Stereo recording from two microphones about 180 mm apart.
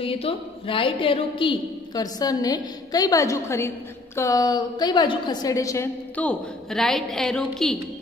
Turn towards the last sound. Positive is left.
turn(degrees=5)  # may be behind; listen again after turning